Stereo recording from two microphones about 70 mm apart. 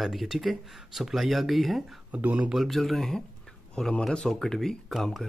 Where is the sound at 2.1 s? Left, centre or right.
Right.